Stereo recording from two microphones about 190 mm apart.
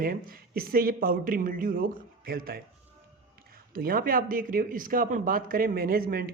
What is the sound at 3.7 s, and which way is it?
Speech, 50° right (ahead or behind).